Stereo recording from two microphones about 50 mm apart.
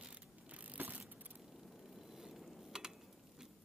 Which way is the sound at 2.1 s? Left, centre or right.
Centre.